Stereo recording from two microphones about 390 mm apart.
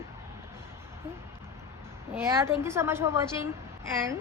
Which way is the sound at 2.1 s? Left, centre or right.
Centre.